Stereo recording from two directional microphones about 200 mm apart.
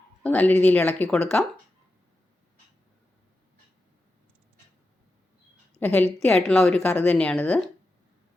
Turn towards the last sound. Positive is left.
turn(degrees=5)  # may be behind; listen again after turning